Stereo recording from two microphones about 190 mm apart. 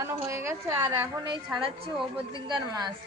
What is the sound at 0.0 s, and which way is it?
Speech, 15° right (ahead or behind).